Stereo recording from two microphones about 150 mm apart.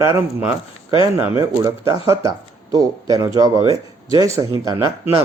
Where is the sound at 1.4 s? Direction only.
20° right (ahead or behind).